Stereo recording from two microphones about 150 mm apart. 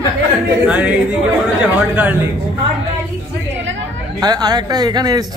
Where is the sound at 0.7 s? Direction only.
10° right (ahead or behind).